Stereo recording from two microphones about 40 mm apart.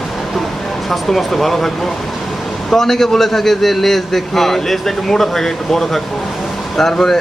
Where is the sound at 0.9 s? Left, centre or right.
Centre.